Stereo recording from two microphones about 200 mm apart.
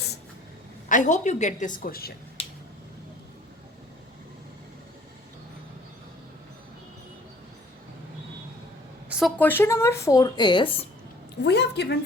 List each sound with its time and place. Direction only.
0.9 s a woman's voice: 40° left (ahead or behind)
9.0 s a sound: 5° right (ahead or behind)
9.4 s speech: 10° left (ahead or behind)
11.4 s a woman's voice: 60° left (ahead or behind)